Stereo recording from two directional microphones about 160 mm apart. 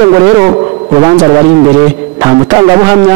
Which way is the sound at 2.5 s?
20° right (ahead or behind).